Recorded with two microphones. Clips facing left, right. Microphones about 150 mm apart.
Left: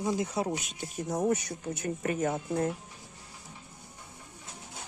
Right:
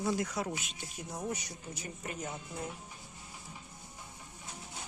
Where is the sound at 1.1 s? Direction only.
55° left (ahead or behind).